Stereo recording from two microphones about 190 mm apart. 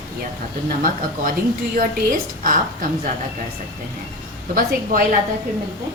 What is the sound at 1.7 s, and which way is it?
Speech, 45° right (ahead or behind).